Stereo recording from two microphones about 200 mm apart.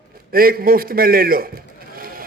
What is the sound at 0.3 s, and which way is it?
A man's voice, 45° right (ahead or behind).